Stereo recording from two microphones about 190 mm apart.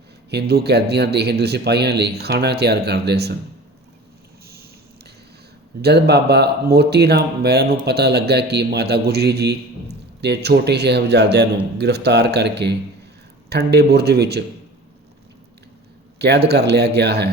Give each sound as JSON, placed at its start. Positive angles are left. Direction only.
{"t": 0.3, "sound": "speech", "side_deg": -60}
{"t": 5.8, "sound": "speech", "side_deg": -60}
{"t": 16.1, "sound": "speech", "side_deg": -60}